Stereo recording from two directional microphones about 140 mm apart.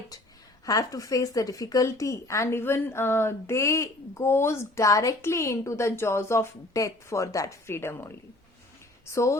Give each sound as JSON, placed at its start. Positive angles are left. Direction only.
{"t": 0.6, "sound": "speech", "side_deg": 25}
{"t": 9.1, "sound": "speech", "side_deg": 20}